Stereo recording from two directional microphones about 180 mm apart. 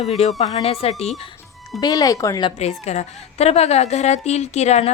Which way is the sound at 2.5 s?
35° left (ahead or behind).